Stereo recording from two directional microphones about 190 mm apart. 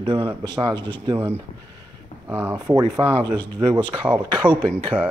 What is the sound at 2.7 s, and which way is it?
Speech, 20° right (ahead or behind).